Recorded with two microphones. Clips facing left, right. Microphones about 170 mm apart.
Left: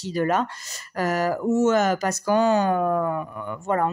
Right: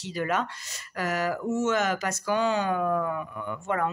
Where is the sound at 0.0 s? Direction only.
40° left (ahead or behind).